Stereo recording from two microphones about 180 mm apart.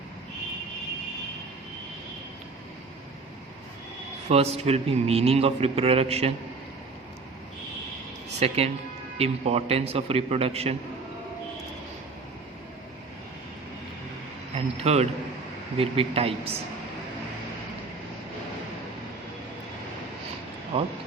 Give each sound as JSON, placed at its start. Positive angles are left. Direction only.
{"t": 4.3, "sound": "a man's voice", "side_deg": -35}
{"t": 8.4, "sound": "a man's voice", "side_deg": -35}
{"t": 14.5, "sound": "a man's voice", "side_deg": -35}
{"t": 20.7, "sound": "a man's voice", "side_deg": -30}